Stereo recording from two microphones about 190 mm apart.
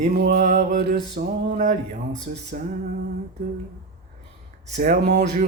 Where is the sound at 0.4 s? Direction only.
45° right (ahead or behind).